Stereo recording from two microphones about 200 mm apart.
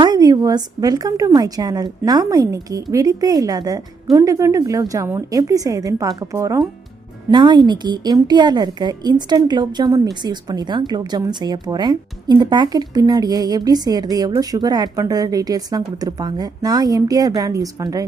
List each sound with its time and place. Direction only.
0.0 s a woman's voice: 20° right (ahead or behind)